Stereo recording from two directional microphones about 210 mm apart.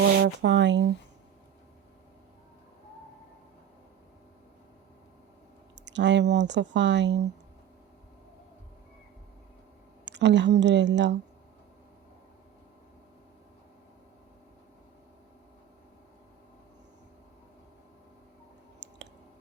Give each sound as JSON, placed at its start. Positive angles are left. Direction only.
{"t": 0.2, "sound": "speech", "side_deg": -55}
{"t": 5.7, "sound": "speech", "side_deg": -55}
{"t": 10.1, "sound": "speech", "side_deg": -55}
{"t": 18.8, "sound": "a sound", "side_deg": -55}